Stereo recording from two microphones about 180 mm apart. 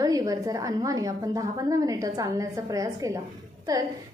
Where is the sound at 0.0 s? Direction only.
20° right (ahead or behind).